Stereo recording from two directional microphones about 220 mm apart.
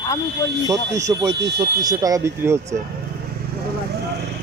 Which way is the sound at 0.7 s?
15° right (ahead or behind).